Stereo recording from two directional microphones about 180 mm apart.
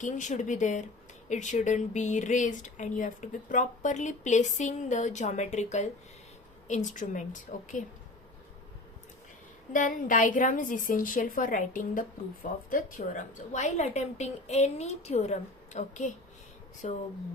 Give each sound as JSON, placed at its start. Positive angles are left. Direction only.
{"t": 0.0, "sound": "a woman's voice", "side_deg": 45}
{"t": 9.7, "sound": "a woman's voice", "side_deg": 45}